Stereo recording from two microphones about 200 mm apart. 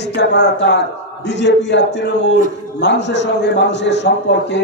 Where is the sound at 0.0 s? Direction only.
60° left (ahead or behind).